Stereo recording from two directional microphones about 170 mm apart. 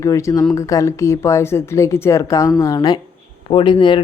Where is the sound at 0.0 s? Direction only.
20° left (ahead or behind).